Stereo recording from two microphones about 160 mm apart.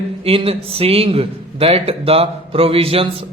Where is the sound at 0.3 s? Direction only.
35° right (ahead or behind).